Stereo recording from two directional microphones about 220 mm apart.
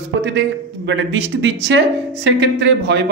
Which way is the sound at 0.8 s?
60° right (ahead or behind).